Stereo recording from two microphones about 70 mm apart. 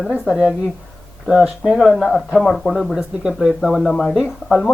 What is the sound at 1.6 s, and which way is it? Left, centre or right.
Speech, centre.